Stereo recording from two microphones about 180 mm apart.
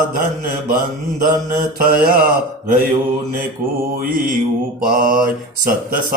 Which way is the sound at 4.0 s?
50° right (ahead or behind).